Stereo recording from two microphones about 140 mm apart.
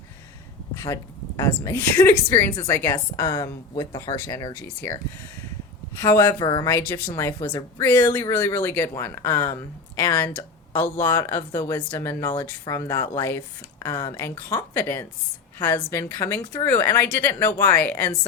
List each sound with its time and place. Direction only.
1.4 s speech: 20° left (ahead or behind)
6.0 s speech: 20° left (ahead or behind)